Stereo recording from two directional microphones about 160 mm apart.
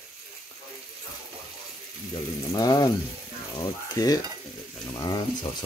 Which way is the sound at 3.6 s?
25° left (ahead or behind).